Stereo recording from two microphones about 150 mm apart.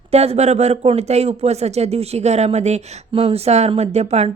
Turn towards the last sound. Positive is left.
turn(degrees=-45)  # may be behind; listen again after turning